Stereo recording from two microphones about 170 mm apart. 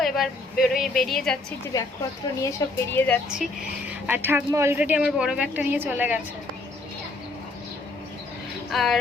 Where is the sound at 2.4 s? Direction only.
20° left (ahead or behind).